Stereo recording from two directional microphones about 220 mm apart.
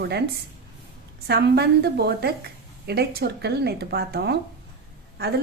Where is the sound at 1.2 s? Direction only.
45° right (ahead or behind).